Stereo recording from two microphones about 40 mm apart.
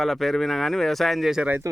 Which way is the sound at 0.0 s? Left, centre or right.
Centre.